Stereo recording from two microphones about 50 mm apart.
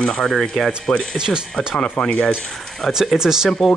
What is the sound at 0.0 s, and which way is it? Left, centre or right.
Speech, centre.